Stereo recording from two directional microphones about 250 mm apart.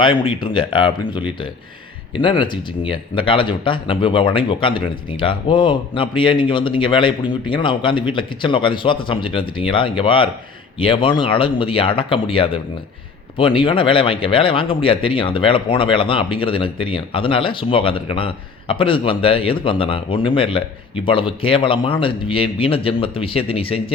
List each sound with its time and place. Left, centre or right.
0.0 s a man's voice: centre